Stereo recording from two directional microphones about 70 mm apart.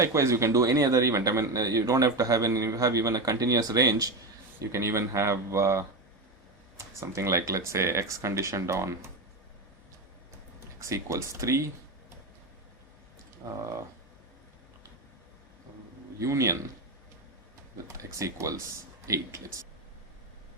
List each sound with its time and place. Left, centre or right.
0.0 s a man's voice: right
4.7 s speech: right
10.8 s speech: right
16.2 s speech: right
17.9 s speech: right